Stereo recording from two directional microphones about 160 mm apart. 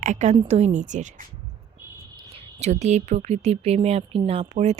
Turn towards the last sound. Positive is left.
turn(degrees=-40)  # may be behind; listen again after turning